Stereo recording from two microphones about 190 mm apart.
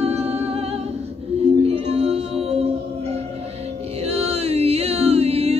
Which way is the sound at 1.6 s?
35° right (ahead or behind).